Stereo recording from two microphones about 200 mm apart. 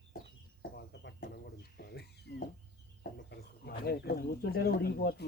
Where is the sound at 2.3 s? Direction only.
55° left (ahead or behind).